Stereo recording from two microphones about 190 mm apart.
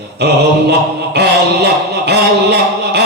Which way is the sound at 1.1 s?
60° right (ahead or behind).